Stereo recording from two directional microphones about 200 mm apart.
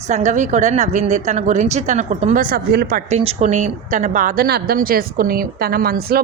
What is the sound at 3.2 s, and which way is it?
A woman's voice, 30° right (ahead or behind).